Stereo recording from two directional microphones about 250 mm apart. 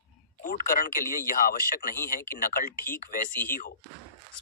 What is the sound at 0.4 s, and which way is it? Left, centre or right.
Speech, left.